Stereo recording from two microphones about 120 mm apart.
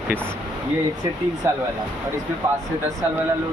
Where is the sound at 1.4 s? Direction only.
20° right (ahead or behind).